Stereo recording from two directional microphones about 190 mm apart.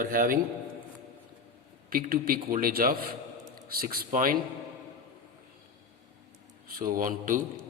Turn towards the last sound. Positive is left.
turn(degrees=-45)  # may be behind; listen again after turning